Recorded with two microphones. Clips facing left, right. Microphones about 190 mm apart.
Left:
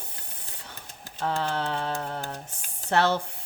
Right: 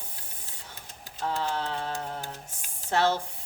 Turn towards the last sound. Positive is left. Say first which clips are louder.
# left 2 dB
turn(degrees=65)  # may be behind; listen again after turning